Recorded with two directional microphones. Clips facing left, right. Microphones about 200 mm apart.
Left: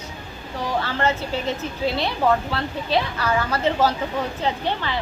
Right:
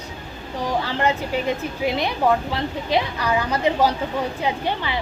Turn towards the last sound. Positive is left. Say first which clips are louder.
# even
turn(degrees=-15)  # may be behind; listen again after turning